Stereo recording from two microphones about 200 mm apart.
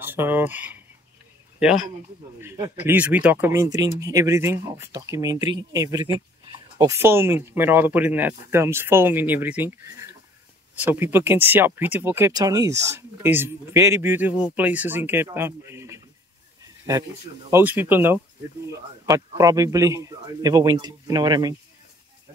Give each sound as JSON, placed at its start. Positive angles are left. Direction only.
{"t": 0.0, "sound": "speech", "side_deg": -10}
{"t": 2.4, "sound": "speech", "side_deg": -15}
{"t": 17.5, "sound": "speech", "side_deg": -10}